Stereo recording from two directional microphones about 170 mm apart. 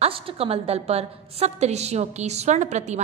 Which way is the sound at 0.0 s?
35° right (ahead or behind).